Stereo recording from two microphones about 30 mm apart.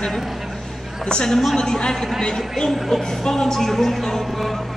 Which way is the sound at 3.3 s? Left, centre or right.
Centre.